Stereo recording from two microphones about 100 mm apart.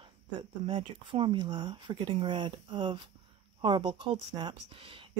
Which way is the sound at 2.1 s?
55° right (ahead or behind).